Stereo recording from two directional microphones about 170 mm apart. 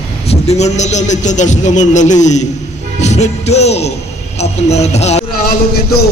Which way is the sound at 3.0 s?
40° left (ahead or behind).